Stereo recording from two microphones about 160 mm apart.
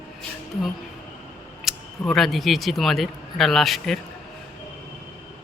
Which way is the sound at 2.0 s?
Centre (ahead or behind).